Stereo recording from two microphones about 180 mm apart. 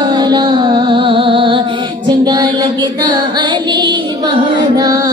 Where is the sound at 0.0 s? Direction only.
25° right (ahead or behind).